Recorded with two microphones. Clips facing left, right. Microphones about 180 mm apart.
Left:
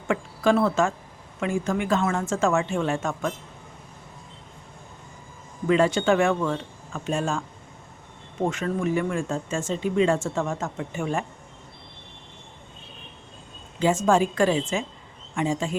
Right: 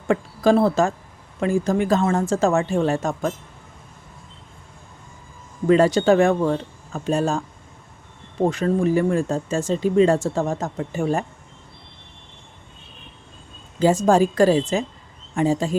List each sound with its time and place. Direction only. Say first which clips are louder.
0.1 s speech: right 4 dB; 35° right (ahead or behind)
5.6 s speech: right 5 dB; 40° right (ahead or behind)
13.7 s speech: right 4 dB; 35° right (ahead or behind)